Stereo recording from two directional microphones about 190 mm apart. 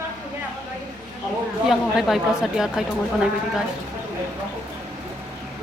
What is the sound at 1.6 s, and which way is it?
Speech, centre (ahead or behind).